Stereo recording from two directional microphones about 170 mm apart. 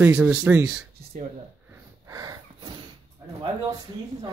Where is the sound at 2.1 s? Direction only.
20° right (ahead or behind).